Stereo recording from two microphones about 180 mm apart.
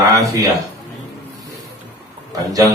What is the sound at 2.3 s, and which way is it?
Speech, 20° right (ahead or behind).